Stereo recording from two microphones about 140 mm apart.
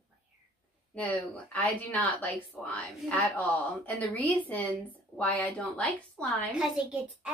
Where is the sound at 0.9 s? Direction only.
10° left (ahead or behind).